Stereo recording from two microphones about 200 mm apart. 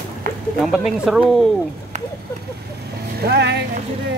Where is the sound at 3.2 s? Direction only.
55° right (ahead or behind).